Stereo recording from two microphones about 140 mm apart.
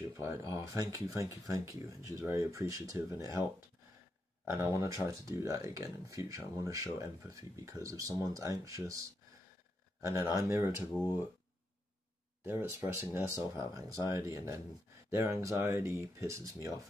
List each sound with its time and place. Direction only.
0.2 s speech: 20° right (ahead or behind)
4.5 s speech: 20° right (ahead or behind)
10.0 s speech: 25° right (ahead or behind)
12.4 s speech: 20° right (ahead or behind)